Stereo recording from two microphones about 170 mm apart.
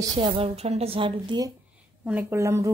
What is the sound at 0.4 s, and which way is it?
A woman's voice, 35° right (ahead or behind).